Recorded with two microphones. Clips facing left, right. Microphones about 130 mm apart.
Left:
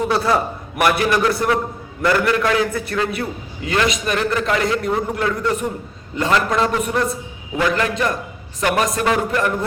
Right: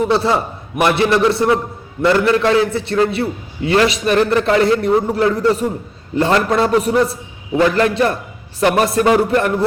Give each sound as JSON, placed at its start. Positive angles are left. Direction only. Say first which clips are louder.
{"t": 0.1, "sound": "a man's voice", "louder": "right 2 dB", "side_deg": -25}